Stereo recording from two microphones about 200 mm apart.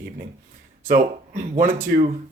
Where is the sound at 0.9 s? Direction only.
40° right (ahead or behind).